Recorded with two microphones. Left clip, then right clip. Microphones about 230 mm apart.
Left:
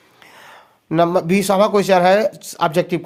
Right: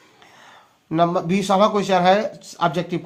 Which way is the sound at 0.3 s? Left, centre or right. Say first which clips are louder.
Left 7 dB; left.